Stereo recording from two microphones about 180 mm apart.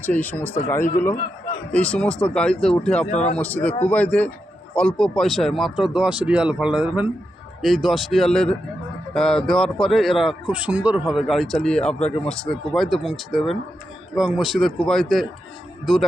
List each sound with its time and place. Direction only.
0.0 s a man's voice: 10° left (ahead or behind)
3.1 s a man's voice: 40° left (ahead or behind)
3.3 s a man's voice: 5° left (ahead or behind)